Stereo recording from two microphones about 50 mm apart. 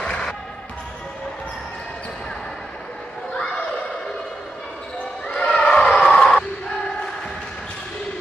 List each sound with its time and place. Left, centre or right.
0.0 s music: centre
5.4 s a sound: left
5.8 s crowd: centre